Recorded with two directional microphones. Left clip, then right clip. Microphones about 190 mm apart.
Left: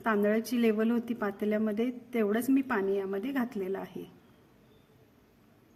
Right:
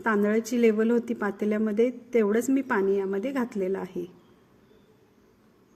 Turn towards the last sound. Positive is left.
turn(degrees=-20)  # may be behind; listen again after turning